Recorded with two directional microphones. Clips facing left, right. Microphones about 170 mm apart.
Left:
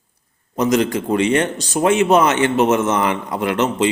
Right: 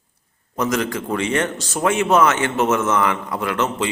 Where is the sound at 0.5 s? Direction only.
20° left (ahead or behind).